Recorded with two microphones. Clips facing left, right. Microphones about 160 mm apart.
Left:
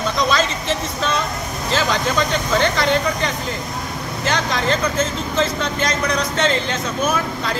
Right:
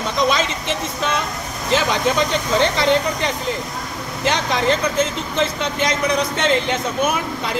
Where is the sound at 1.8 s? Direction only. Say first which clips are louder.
Right 1 dB; 20° right (ahead or behind).